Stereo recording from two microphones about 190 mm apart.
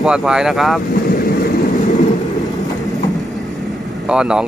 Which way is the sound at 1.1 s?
50° left (ahead or behind).